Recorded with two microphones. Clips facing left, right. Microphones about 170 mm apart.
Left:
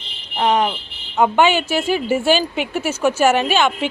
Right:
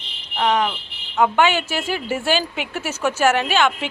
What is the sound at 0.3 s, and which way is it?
A woman's voice, 25° left (ahead or behind).